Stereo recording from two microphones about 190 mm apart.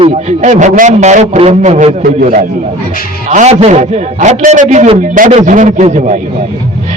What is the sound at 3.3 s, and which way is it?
A man's voice, 35° right (ahead or behind).